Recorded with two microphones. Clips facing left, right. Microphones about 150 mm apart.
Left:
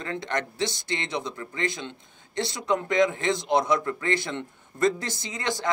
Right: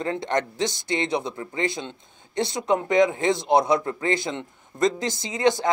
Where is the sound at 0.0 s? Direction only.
25° right (ahead or behind).